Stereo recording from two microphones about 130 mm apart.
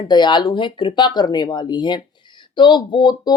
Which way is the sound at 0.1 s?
35° left (ahead or behind).